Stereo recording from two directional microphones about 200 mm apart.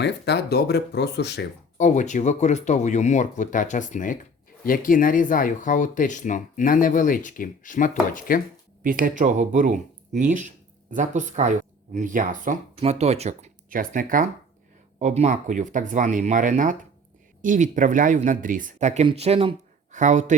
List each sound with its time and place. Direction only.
0.0 s speech: 55° left (ahead or behind)
1.8 s speech: 40° left (ahead or behind)
8.8 s speech: 45° right (ahead or behind)